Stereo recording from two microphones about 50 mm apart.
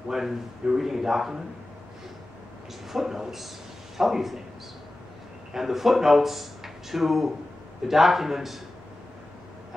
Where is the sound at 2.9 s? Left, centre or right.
Centre.